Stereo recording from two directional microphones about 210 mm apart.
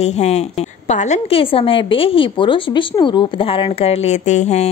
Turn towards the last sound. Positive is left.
turn(degrees=30)  # may be behind; listen again after turning